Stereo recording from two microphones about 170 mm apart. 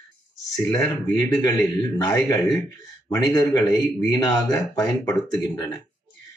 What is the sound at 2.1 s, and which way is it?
Speech, centre (ahead or behind).